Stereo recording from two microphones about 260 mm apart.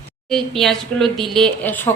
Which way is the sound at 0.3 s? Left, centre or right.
Centre.